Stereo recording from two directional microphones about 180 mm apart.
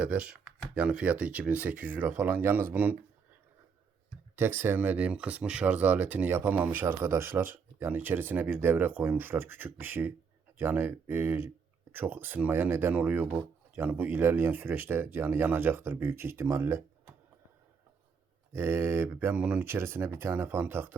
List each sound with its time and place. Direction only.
0.0 s speech: 5° right (ahead or behind)
4.4 s speech: 10° right (ahead or behind)
18.5 s speech: 15° right (ahead or behind)